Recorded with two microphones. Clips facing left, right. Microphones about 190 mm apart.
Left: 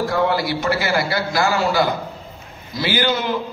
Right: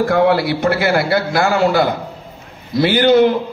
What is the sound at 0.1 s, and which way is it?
A man's voice, 65° right (ahead or behind).